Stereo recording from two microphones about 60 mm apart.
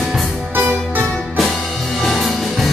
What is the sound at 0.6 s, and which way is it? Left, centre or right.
Music, right.